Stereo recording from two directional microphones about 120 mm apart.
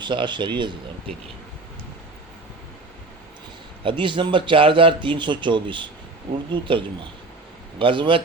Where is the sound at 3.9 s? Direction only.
40° right (ahead or behind).